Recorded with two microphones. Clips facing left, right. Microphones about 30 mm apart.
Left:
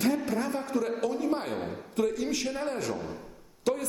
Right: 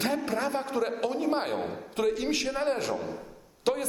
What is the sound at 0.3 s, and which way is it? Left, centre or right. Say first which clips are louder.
A man's voice: right 1 dB; right.